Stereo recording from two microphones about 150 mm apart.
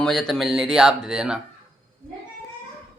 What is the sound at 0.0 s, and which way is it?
Speech, centre (ahead or behind).